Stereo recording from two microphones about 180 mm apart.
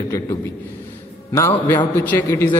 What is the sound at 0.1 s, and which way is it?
A man's voice, 15° left (ahead or behind).